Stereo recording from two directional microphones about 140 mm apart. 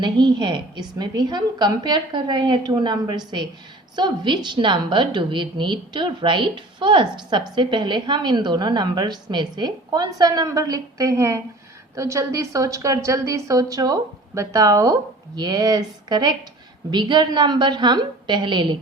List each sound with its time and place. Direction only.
0.0 s a woman's voice: 35° right (ahead or behind)